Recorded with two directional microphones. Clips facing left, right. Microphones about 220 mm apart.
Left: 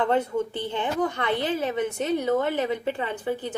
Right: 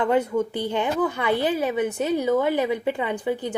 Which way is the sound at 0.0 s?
10° right (ahead or behind).